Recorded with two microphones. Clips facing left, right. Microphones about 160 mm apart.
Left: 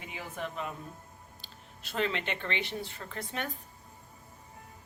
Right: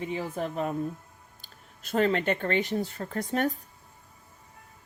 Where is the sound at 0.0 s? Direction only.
35° right (ahead or behind).